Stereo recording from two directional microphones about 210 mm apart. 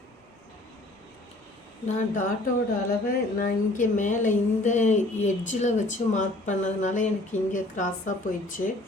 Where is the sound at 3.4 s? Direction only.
40° left (ahead or behind).